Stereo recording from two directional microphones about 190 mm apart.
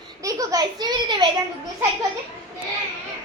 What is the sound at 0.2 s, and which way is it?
A child's voice, 20° right (ahead or behind).